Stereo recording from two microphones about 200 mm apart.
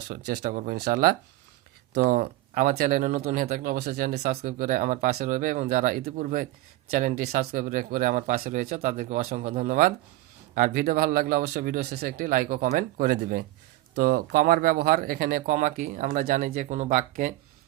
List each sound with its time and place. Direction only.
0.1 s speech: 50° right (ahead or behind)